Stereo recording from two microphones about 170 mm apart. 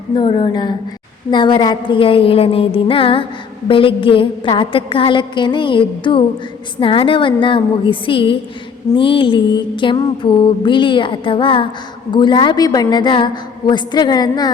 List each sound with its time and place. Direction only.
0.2 s mantra: 30° left (ahead or behind)
1.3 s music: 25° left (ahead or behind)
3.7 s mantra: 30° left (ahead or behind)
6.7 s music: 30° left (ahead or behind)
9.0 s mantra: 30° left (ahead or behind)